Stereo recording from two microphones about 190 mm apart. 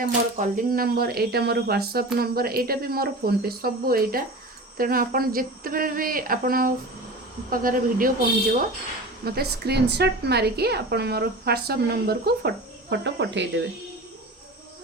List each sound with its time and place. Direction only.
0.0 s a woman's voice: 45° right (ahead or behind)
9.2 s a woman's voice: 55° right (ahead or behind)